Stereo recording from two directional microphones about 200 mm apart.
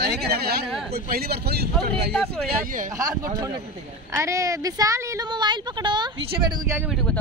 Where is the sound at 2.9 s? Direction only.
20° right (ahead or behind).